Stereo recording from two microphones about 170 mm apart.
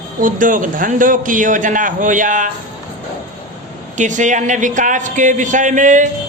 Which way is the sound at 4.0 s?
45° right (ahead or behind).